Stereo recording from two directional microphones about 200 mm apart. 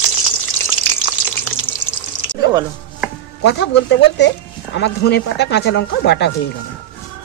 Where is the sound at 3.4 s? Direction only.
60° left (ahead or behind).